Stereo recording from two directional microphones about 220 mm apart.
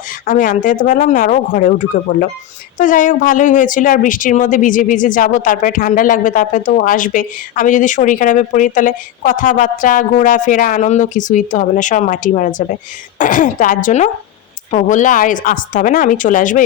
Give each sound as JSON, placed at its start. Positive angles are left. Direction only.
{"t": 0.3, "sound": "speech", "side_deg": 35}
{"t": 2.7, "sound": "speech", "side_deg": 35}